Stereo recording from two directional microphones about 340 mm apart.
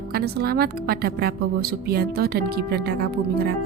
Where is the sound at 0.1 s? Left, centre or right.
Right.